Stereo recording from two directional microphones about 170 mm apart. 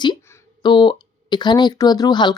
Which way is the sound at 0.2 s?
15° left (ahead or behind).